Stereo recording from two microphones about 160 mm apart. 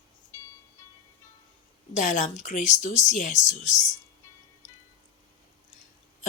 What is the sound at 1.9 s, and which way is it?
Speech, 50° left (ahead or behind).